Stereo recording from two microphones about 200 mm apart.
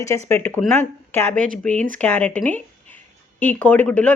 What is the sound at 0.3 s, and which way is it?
Speech, 10° left (ahead or behind).